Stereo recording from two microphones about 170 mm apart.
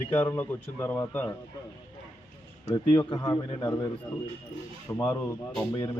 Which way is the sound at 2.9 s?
25° left (ahead or behind).